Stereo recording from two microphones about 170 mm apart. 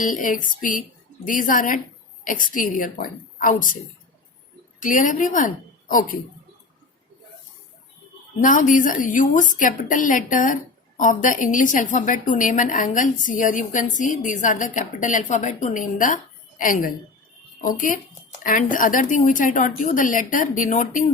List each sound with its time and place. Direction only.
0.0 s a woman's voice: 50° left (ahead or behind)
4.8 s a woman's voice: 50° left (ahead or behind)
8.4 s a woman's voice: 50° left (ahead or behind)